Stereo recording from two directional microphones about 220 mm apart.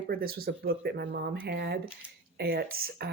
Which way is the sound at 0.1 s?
45° right (ahead or behind).